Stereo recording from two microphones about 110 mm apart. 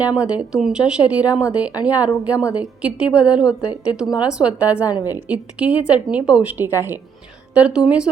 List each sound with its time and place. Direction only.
0.0 s a woman's voice: 10° right (ahead or behind)
4.9 s a woman's voice: 35° left (ahead or behind)
5.1 s a woman's voice: 10° right (ahead or behind)